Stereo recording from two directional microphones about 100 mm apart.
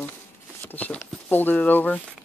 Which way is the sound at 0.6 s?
20° left (ahead or behind).